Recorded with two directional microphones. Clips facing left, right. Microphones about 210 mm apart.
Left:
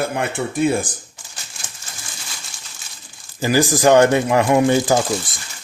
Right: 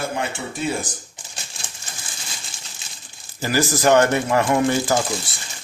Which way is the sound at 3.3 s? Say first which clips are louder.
Left 4 dB; 15° left (ahead or behind).